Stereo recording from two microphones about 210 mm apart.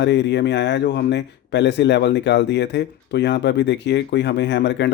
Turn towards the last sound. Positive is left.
turn(degrees=55)  # may be behind; listen again after turning